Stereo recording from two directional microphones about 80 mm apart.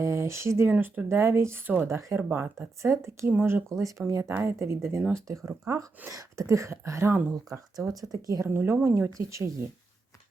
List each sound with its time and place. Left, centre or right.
0.0 s speech: right
0.7 s speech: right
1.0 s speech: right
3.2 s speech: right
3.5 s speech: right
7.8 s speech: right
8.4 s speech: right